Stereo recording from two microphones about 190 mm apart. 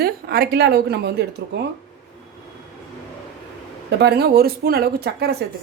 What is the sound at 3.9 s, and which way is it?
A woman's voice, 60° right (ahead or behind).